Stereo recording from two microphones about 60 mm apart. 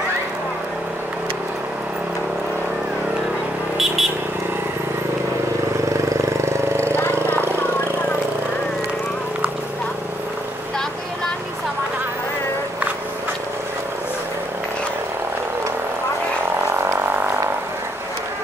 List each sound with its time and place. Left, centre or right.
3.7 s vehicle: centre
5.9 s vehicle: right
7.0 s a sound: left